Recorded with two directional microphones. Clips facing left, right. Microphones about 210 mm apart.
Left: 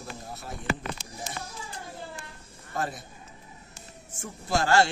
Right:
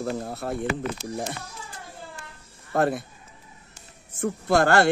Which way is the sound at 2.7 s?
60° right (ahead or behind).